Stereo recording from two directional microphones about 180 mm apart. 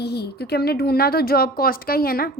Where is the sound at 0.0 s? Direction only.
65° left (ahead or behind).